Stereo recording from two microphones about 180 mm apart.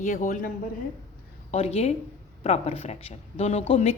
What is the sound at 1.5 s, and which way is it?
Speech, 35° left (ahead or behind).